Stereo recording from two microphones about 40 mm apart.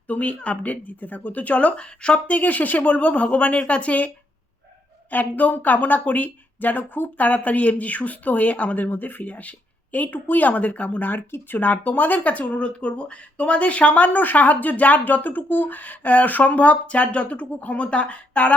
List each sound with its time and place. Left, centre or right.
0.1 s speech: left
2.2 s speech: left
5.1 s speech: left
11.3 s speech: left
11.6 s speech: left